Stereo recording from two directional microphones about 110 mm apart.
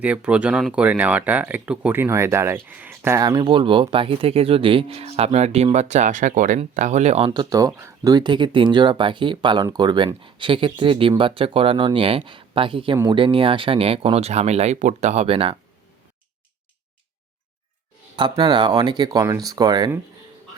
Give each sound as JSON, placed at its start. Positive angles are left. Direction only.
{"t": 0.0, "sound": "speech", "side_deg": -10}
{"t": 3.4, "sound": "speech", "side_deg": -50}
{"t": 5.7, "sound": "speech", "side_deg": -90}
{"t": 7.3, "sound": "speech", "side_deg": -35}
{"t": 8.1, "sound": "speech", "side_deg": -45}
{"t": 18.2, "sound": "speech", "side_deg": -40}